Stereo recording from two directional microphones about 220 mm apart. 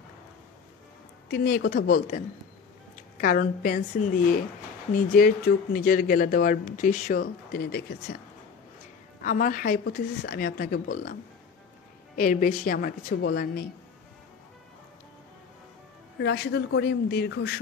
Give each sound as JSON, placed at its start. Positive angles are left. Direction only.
{"t": 1.3, "sound": "speech", "side_deg": 45}
{"t": 4.9, "sound": "speech", "side_deg": 40}
{"t": 9.2, "sound": "speech", "side_deg": 35}
{"t": 12.2, "sound": "speech", "side_deg": 35}
{"t": 16.2, "sound": "speech", "side_deg": 50}